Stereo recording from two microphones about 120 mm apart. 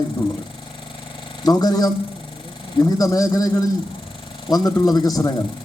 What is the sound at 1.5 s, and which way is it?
Speech, 35° left (ahead or behind).